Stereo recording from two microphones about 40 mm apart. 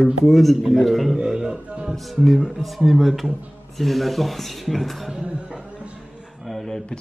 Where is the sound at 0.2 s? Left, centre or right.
Centre.